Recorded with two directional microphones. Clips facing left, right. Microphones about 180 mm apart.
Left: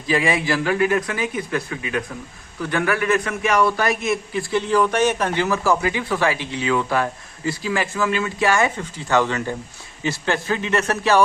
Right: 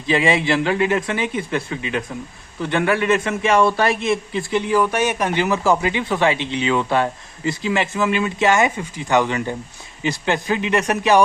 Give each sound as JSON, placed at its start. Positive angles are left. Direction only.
{"t": 0.1, "sound": "a man's voice", "side_deg": -25}